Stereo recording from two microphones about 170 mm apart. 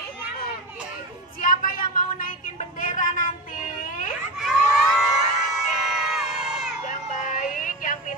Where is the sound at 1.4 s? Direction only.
55° left (ahead or behind).